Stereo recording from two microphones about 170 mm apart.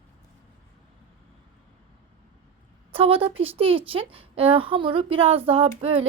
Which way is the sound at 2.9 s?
35° right (ahead or behind).